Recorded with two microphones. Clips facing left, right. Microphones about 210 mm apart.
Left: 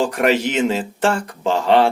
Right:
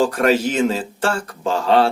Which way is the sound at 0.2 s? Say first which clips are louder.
Right 1 dB; 15° left (ahead or behind).